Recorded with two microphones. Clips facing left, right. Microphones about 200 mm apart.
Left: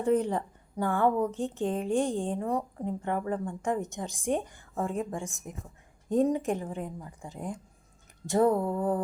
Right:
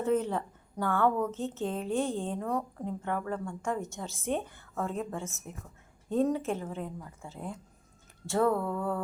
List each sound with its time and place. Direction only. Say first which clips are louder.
0.0 s a woman's voice: left 2 dB; 15° left (ahead or behind)